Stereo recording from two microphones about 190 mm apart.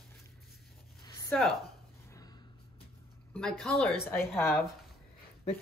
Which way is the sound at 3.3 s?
5° left (ahead or behind).